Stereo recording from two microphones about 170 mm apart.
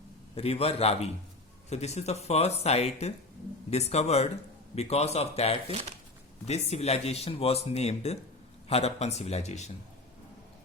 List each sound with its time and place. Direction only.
0.3 s speech: 35° left (ahead or behind)